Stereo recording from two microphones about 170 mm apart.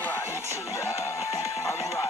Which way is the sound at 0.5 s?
15° left (ahead or behind).